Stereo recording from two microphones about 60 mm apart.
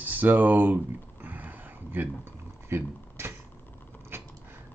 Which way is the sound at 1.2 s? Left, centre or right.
Right.